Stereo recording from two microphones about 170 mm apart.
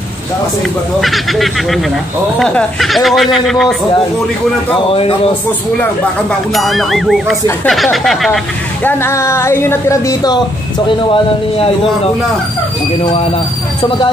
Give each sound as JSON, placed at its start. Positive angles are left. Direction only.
{"t": 1.0, "sound": "speech", "side_deg": 0}
{"t": 6.5, "sound": "speech", "side_deg": 0}
{"t": 8.8, "sound": "speech", "side_deg": 15}